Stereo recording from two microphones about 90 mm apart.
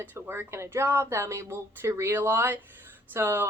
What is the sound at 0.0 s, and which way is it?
A woman's voice, 20° right (ahead or behind).